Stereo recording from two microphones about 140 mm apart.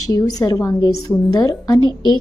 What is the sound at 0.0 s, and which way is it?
A child's voice, 25° left (ahead or behind).